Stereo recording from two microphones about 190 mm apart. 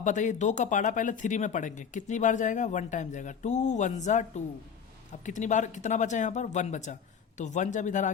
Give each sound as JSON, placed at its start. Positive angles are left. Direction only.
{"t": 0.0, "sound": "speech", "side_deg": 40}